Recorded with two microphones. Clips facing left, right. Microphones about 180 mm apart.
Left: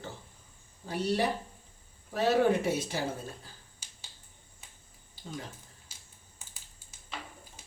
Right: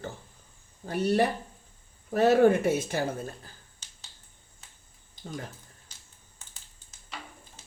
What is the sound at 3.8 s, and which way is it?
Finger snapping, 10° left (ahead or behind).